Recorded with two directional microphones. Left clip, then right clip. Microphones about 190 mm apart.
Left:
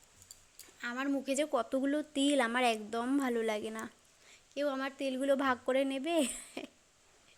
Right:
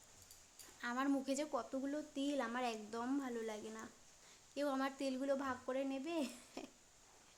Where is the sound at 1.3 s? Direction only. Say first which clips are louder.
Left 10 dB; 25° left (ahead or behind).